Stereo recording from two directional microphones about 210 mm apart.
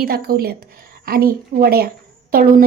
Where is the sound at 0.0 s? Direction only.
45° right (ahead or behind).